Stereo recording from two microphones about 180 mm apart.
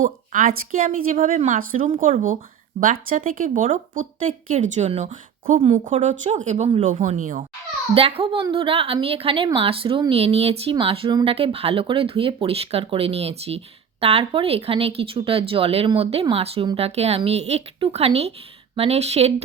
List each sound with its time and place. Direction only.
0.0 s a woman's voice: 45° right (ahead or behind)
7.9 s a woman's voice: 30° right (ahead or behind)